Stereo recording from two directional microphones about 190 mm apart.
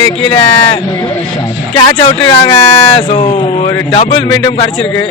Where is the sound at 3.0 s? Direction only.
25° left (ahead or behind).